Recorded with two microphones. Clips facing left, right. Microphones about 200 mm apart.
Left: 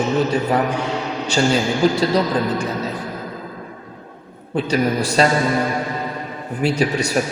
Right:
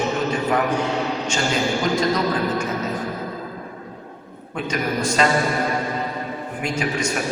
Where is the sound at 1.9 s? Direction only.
35° left (ahead or behind).